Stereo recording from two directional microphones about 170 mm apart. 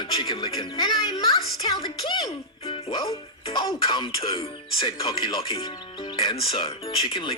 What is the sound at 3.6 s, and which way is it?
Speech, 25° left (ahead or behind).